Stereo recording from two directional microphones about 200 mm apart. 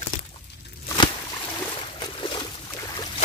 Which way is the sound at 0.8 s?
25° left (ahead or behind).